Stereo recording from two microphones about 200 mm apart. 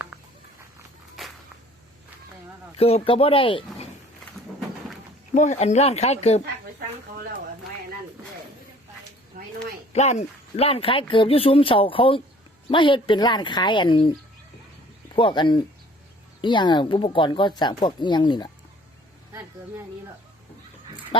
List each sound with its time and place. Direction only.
0.1 s patter: 5° right (ahead or behind)
1.2 s a sound: centre (ahead or behind)
2.7 s speech: 30° left (ahead or behind)
5.3 s speech: 35° left (ahead or behind)
9.3 s a sound: 40° right (ahead or behind)
9.9 s speech: 35° left (ahead or behind)
15.1 s speech: 25° left (ahead or behind)
19.3 s speech: 15° right (ahead or behind)